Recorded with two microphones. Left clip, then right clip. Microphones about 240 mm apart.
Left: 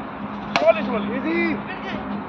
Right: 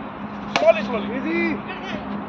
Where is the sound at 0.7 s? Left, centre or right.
Right.